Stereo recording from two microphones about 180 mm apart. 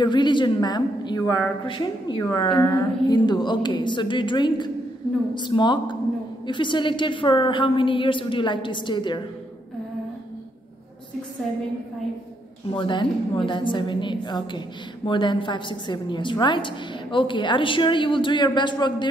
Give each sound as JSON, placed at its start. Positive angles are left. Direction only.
{"t": 0.0, "sound": "a woman's voice", "side_deg": 25}
{"t": 12.7, "sound": "a woman's voice", "side_deg": 25}